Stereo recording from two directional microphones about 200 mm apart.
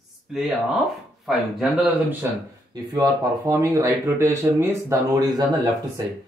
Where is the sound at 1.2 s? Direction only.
Centre (ahead or behind).